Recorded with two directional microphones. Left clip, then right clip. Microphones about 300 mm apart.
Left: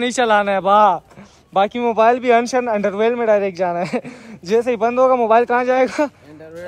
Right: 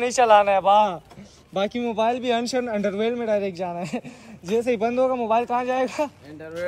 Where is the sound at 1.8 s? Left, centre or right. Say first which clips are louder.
Left 9 dB; left.